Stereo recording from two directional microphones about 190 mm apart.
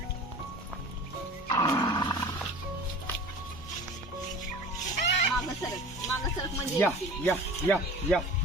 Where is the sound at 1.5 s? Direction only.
20° left (ahead or behind).